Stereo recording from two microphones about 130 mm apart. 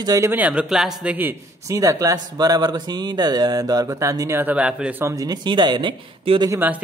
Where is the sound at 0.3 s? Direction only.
10° right (ahead or behind).